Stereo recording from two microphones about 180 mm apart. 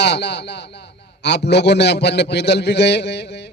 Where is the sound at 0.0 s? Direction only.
70° left (ahead or behind).